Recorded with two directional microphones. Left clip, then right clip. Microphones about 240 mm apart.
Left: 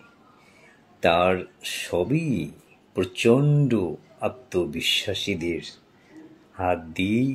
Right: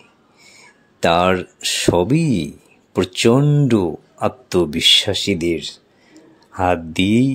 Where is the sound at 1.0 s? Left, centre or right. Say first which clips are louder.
Right 5 dB; right.